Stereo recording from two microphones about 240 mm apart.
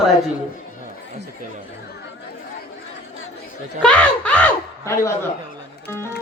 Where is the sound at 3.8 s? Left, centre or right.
Centre.